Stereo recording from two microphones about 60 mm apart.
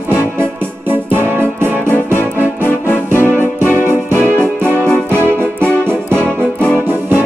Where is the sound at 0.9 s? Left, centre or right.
Right.